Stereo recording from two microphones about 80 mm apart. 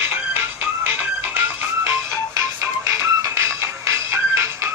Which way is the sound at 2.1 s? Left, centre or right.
Right.